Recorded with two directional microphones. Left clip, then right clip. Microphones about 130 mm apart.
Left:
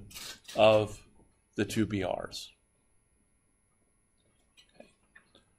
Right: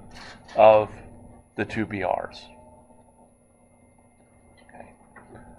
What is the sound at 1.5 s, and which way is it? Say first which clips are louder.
Speech: right 3 dB; 35° left (ahead or behind).